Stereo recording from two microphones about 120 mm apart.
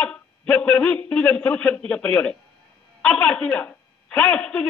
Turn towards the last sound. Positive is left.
turn(degrees=10)  # may be behind; listen again after turning